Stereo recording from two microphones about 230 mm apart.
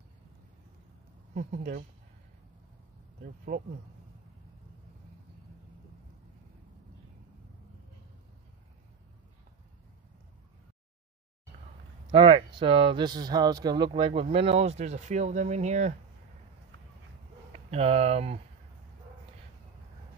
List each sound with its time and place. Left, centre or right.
1.3 s speech: right
3.5 s speech: right
12.1 s speech: right
17.5 s speech: right